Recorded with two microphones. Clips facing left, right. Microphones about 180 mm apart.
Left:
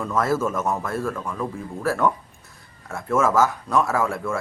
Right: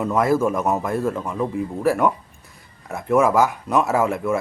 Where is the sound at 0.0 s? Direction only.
15° right (ahead or behind).